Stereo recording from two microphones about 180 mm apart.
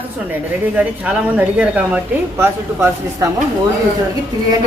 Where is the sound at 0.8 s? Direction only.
5° right (ahead or behind).